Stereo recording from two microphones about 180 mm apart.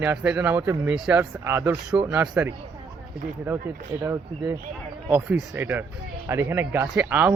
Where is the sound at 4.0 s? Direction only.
15° right (ahead or behind).